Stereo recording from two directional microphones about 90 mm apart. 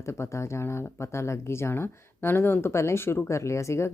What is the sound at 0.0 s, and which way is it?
Speech, 30° left (ahead or behind).